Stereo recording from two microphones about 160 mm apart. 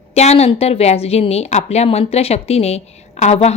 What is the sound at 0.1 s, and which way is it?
A woman's voice, 40° left (ahead or behind).